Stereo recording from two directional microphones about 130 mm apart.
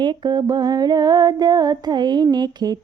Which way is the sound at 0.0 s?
35° right (ahead or behind).